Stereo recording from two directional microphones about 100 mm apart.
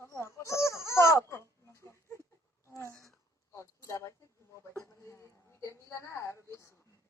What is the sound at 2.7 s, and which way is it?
Speech, 25° left (ahead or behind).